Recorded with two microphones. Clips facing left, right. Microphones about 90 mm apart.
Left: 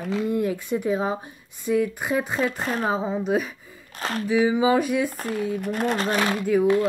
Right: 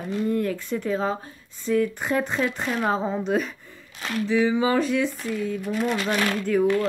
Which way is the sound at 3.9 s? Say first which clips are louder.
Left 1 dB; 40° left (ahead or behind).